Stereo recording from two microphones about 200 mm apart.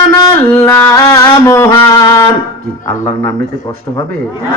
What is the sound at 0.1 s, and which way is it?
Music, 10° left (ahead or behind).